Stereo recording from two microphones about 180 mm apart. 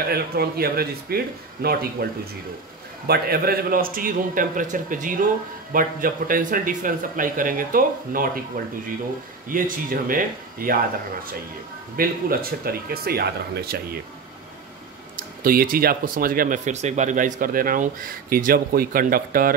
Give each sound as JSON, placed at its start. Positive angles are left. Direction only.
{"t": 0.1, "sound": "speech", "side_deg": -60}
{"t": 3.1, "sound": "a man's voice", "side_deg": -60}
{"t": 9.5, "sound": "a man's voice", "side_deg": -50}
{"t": 12.0, "sound": "speech", "side_deg": -55}
{"t": 15.1, "sound": "a man's voice", "side_deg": -50}